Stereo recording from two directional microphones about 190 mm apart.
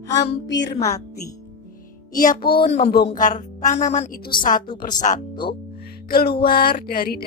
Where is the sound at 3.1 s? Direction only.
40° left (ahead or behind).